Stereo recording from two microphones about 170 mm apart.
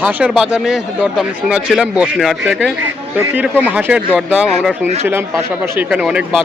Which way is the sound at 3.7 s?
10° right (ahead or behind).